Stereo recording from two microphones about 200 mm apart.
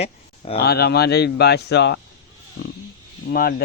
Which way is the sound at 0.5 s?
50° left (ahead or behind).